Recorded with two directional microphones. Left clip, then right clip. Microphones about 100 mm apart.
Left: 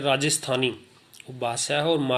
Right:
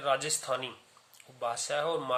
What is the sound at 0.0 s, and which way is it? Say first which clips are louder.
Speech: left 6 dB; 20° left (ahead or behind).